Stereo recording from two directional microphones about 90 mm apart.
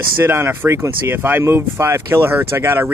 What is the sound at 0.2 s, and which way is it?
Speech, 25° right (ahead or behind).